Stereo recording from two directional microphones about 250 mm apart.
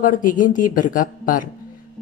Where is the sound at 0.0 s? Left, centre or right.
Left.